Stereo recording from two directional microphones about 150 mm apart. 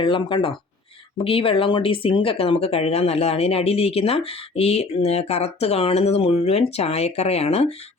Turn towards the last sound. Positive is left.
turn(degrees=45)  # may be behind; listen again after turning